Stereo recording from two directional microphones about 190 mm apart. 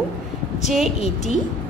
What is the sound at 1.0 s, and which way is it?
Speech, 35° left (ahead or behind).